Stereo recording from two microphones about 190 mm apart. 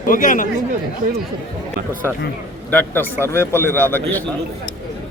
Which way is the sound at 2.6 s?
10° left (ahead or behind).